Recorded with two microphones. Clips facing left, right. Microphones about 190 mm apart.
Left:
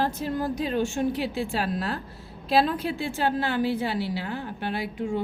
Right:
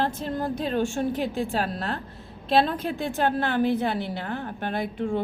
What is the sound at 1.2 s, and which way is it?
Speech, 45° right (ahead or behind).